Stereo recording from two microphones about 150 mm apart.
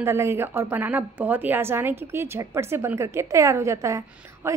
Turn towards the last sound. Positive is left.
turn(degrees=-20)  # may be behind; listen again after turning